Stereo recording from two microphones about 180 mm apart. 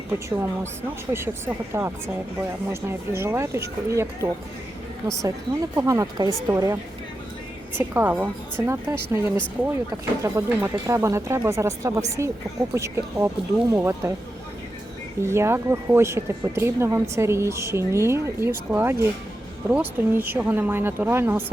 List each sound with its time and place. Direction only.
0.1 s speech: 15° right (ahead or behind)
5.7 s speech: 15° right (ahead or behind)
15.2 s speech: 15° right (ahead or behind)